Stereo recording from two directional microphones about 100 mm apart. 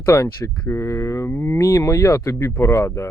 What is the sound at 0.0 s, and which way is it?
Speech, 30° left (ahead or behind).